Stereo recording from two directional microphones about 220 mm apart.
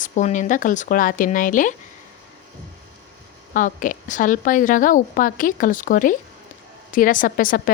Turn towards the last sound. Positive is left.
turn(degrees=40)  # may be behind; listen again after turning